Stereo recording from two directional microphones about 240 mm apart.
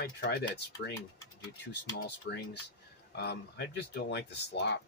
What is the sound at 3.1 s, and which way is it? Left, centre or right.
Speech, left.